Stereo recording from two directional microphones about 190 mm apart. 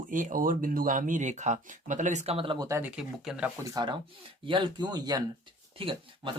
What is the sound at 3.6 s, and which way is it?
Speech, 20° right (ahead or behind).